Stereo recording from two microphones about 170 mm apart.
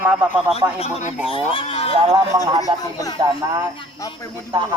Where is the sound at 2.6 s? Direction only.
20° left (ahead or behind).